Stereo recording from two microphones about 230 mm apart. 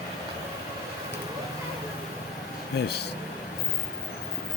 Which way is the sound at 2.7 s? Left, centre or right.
Left.